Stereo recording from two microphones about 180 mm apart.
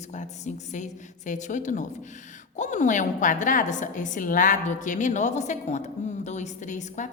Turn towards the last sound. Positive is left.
turn(degrees=45)  # may be behind; listen again after turning